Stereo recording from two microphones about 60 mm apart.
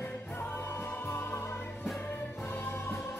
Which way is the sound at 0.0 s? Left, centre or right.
Left.